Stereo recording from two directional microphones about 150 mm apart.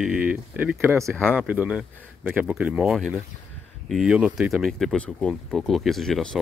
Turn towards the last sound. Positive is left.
turn(degrees=5)  # may be behind; listen again after turning